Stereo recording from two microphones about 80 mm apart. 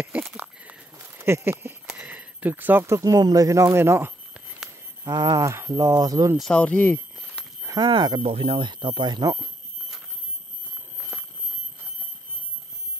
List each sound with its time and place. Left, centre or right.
0.4 s a sound: centre
1.0 s a sound: right
2.9 s speech: right
5.0 s speech: right
5.5 s speech: right
6.4 s speech: centre
7.8 s speech: right